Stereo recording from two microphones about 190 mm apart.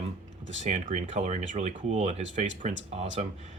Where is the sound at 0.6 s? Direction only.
40° right (ahead or behind).